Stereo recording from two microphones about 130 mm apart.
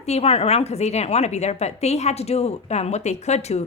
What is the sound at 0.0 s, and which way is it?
Speech, 55° left (ahead or behind).